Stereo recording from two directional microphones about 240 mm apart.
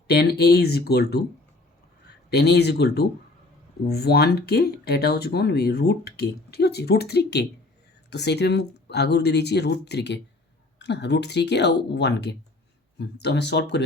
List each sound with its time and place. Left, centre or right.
0.1 s speech: left
2.3 s speech: left